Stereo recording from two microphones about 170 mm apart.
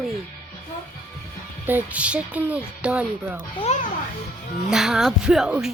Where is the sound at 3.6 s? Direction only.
40° left (ahead or behind).